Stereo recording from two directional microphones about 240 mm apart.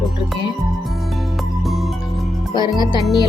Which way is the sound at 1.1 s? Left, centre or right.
Centre.